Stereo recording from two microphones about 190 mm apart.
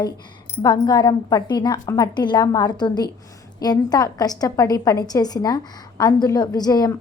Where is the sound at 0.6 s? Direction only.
20° left (ahead or behind).